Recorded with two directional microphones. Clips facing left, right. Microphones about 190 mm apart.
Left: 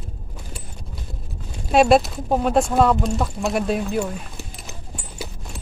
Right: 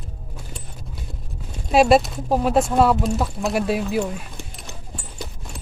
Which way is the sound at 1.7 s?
Centre (ahead or behind).